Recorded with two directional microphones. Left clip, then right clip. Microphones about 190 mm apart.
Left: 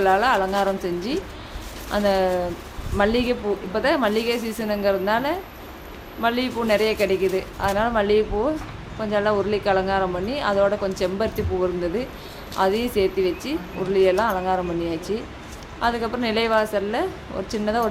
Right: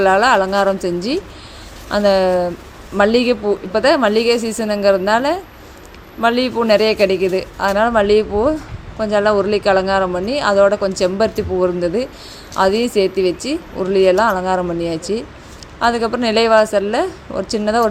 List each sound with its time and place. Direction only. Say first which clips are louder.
0.0 s speech: right 6 dB; 35° right (ahead or behind)